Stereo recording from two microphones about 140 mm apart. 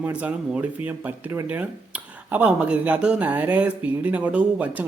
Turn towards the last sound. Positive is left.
turn(degrees=-10)  # may be behind; listen again after turning